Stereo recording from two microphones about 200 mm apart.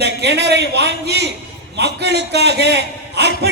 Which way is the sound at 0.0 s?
55° right (ahead or behind).